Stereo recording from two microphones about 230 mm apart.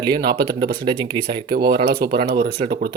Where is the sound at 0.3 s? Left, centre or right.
Centre.